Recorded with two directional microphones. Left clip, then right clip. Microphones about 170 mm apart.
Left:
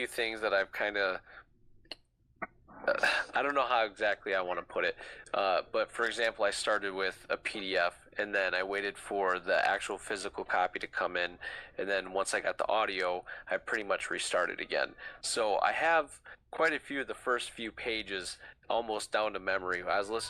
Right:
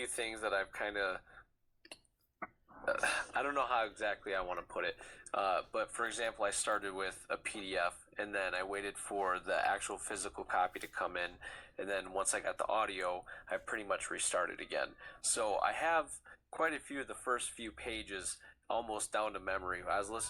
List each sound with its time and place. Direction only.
0.0 s speech: 35° left (ahead or behind)
2.4 s speech: 35° left (ahead or behind)